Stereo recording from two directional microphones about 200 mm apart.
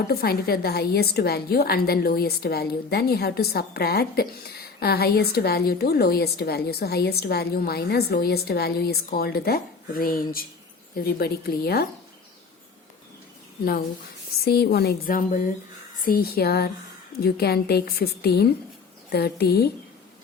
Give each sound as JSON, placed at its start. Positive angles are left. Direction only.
{"t": 0.1, "sound": "a woman's voice", "side_deg": 50}
{"t": 14.4, "sound": "a woman's voice", "side_deg": 50}